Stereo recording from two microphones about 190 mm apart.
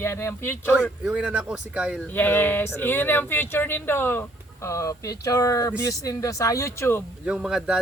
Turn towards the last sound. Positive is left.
turn(degrees=-5)  # may be behind; listen again after turning